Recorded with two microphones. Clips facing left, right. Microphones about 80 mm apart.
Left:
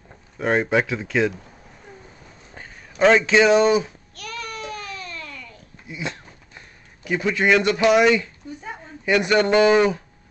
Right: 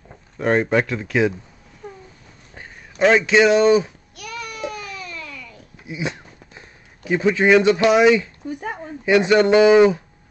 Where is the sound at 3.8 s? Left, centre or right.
Centre.